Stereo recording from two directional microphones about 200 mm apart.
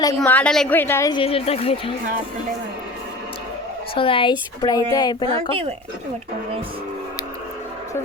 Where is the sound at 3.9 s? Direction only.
25° left (ahead or behind).